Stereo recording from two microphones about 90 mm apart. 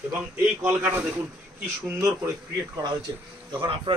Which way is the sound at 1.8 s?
30° right (ahead or behind).